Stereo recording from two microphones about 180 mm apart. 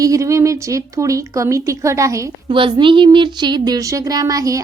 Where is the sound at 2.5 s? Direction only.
30° right (ahead or behind).